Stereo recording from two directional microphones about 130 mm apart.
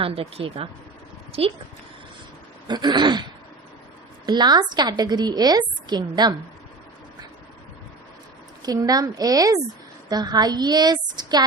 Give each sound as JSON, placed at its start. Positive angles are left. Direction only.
{"t": 0.0, "sound": "a woman's voice", "side_deg": -45}
{"t": 2.6, "sound": "a woman's voice", "side_deg": -35}
{"t": 4.3, "sound": "a woman's voice", "side_deg": -35}
{"t": 8.6, "sound": "a woman's voice", "side_deg": -30}